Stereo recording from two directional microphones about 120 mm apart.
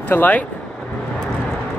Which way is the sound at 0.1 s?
15° left (ahead or behind).